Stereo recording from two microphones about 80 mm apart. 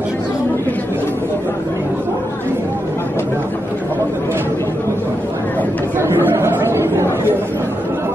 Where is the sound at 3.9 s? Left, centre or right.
Right.